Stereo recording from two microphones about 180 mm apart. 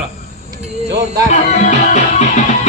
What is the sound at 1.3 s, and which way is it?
Music, 40° left (ahead or behind).